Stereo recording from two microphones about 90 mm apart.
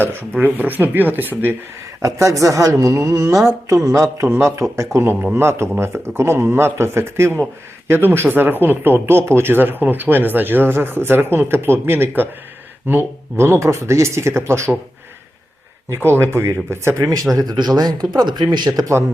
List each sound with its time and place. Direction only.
0.0 s speech: 25° right (ahead or behind)
2.0 s speech: 35° right (ahead or behind)
16.0 s speech: 25° right (ahead or behind)
17.3 s speech: 50° right (ahead or behind)